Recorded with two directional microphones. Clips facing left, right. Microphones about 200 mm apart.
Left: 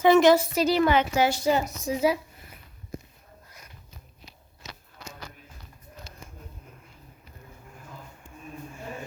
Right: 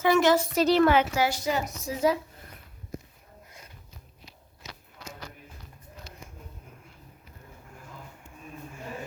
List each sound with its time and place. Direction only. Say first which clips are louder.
0.0 s a woman's voice: left 4 dB; 20° left (ahead or behind)
0.5 s a woman's voice: right 1 dB; centre (ahead or behind)
1.1 s a woman's voice: left 4 dB; 25° left (ahead or behind)
1.8 s a sound: left 1 dB; 15° left (ahead or behind)